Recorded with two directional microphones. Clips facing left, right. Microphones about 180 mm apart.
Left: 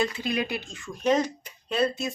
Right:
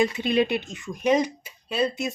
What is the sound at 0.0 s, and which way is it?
Speech, 20° right (ahead or behind).